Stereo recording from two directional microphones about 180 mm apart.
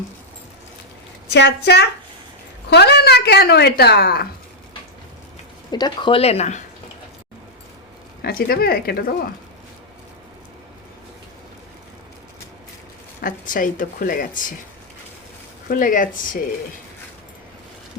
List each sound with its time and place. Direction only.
1.3 s a woman's voice: 70° left (ahead or behind)
5.7 s speech: 25° left (ahead or behind)
8.2 s a woman's voice: 55° left (ahead or behind)
13.2 s speech: 50° left (ahead or behind)
15.7 s speech: 50° left (ahead or behind)